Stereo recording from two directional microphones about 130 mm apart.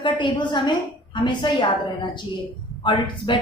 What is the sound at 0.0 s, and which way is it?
A woman's voice, 35° left (ahead or behind).